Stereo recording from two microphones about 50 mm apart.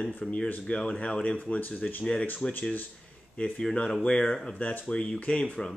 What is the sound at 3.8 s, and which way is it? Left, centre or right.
Speech, centre.